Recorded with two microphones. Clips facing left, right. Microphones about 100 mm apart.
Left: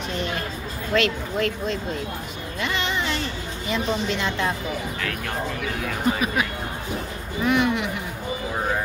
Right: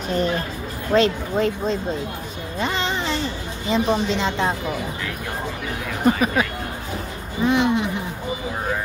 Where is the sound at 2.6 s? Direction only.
35° right (ahead or behind).